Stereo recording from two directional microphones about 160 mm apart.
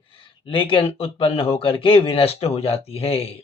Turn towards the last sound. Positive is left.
turn(degrees=40)  # may be behind; listen again after turning